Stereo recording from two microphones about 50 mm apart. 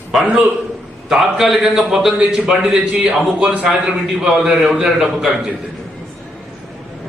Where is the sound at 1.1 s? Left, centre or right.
Centre.